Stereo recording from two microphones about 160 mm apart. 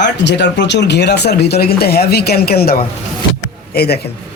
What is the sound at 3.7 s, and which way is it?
Speech, 80° left.